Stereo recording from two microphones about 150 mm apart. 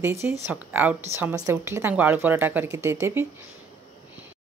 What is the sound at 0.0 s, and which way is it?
Speech, 20° right (ahead or behind).